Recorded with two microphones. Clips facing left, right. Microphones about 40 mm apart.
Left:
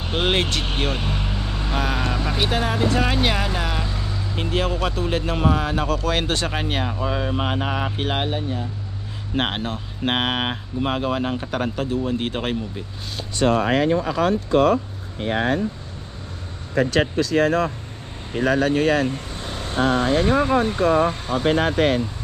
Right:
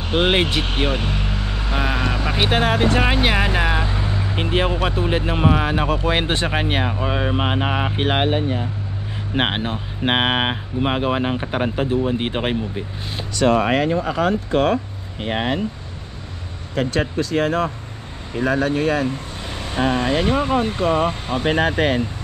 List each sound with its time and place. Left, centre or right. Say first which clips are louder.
0.1 s speech: right 4 dB; centre
2.5 s speech: right 5 dB; right
3.0 s speech: right 3 dB; right
4.5 s speech: right 2 dB; right
13.4 s speech: right 2 dB; right
14.0 s speech: right 1 dB; right
17.4 s speech: left 1 dB; centre
19.7 s speech: even; right